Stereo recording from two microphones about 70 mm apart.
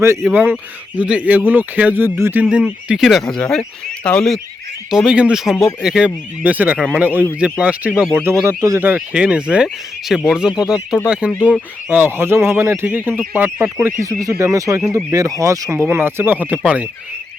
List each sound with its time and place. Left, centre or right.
0.0 s speech: right
0.5 s speech: centre; by 2.3 s right
2.3 s speech: centre
3.0 s speech: centre
4.9 s speech: centre
6.4 s speech: right
6.7 s a man's voice: centre
7.0 s speech: right
8.1 s speech: right
8.4 s speech: right
9.0 s speech: centre
11.9 s speech: right
14.0 s speech: right